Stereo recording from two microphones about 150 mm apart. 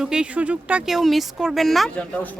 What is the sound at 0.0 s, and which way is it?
Speech, 5° right (ahead or behind).